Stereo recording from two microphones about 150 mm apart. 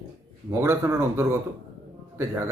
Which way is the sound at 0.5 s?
15° right (ahead or behind).